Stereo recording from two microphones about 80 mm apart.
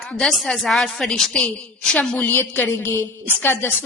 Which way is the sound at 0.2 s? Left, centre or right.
Centre.